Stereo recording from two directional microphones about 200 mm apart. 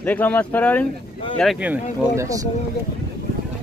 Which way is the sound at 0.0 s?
10° left (ahead or behind).